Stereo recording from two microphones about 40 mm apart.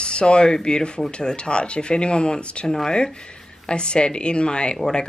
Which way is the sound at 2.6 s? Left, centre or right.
Centre.